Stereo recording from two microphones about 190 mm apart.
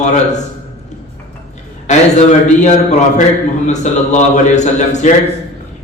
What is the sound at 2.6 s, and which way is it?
A man's voice, 40° left (ahead or behind).